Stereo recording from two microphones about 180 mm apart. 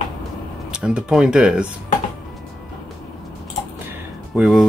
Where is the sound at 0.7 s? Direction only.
5° right (ahead or behind).